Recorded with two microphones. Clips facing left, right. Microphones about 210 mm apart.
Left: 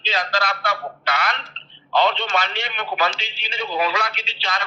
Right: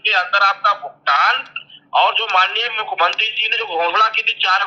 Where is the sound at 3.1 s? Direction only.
10° left (ahead or behind).